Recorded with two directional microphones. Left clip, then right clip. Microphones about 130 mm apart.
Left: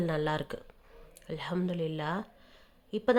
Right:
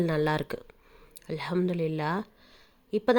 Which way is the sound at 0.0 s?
30° right (ahead or behind).